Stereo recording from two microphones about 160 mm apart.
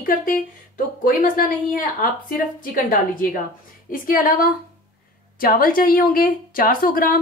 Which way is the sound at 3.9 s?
60° left (ahead or behind).